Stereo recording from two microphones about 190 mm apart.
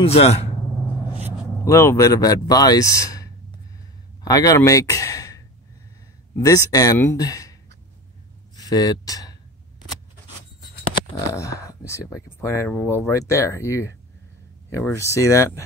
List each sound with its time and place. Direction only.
0.0 s speech: 30° left (ahead or behind)
1.6 s a man's voice: 15° left (ahead or behind)
8.5 s speech: 20° left (ahead or behind)
11.1 s speech: 15° left (ahead or behind)